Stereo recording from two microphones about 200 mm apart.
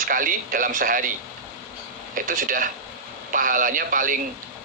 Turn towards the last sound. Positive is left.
turn(degrees=-45)  # may be behind; listen again after turning